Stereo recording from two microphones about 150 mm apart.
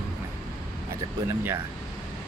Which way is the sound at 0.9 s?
15° right (ahead or behind).